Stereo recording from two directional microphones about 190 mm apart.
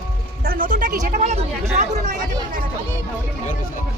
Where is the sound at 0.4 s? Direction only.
45° right (ahead or behind).